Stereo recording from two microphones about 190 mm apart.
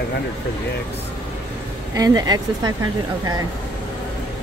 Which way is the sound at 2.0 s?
20° right (ahead or behind).